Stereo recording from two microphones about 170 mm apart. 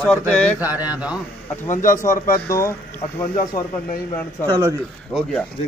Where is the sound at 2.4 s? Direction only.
15° left (ahead or behind).